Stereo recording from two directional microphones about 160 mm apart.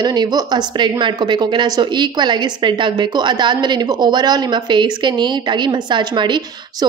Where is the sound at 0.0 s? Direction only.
25° right (ahead or behind).